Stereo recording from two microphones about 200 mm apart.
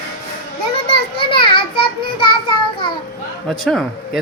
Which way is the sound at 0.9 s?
25° left (ahead or behind).